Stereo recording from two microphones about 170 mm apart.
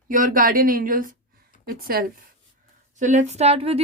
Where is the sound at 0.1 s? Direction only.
55° right (ahead or behind).